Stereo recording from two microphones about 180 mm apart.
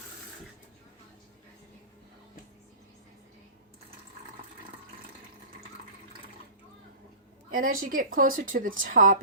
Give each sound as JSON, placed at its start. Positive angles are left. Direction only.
{"t": 7.5, "sound": "speech", "side_deg": -55}